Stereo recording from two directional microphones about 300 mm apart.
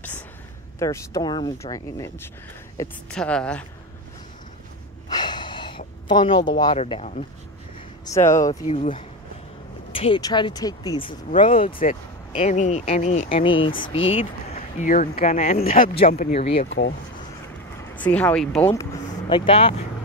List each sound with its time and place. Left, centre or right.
0.7 s a woman's voice: centre
5.1 s a sound: centre
6.0 s speech: centre
8.0 s speech: centre
8.7 s speech: left
16.6 s speech: left
17.9 s speech: centre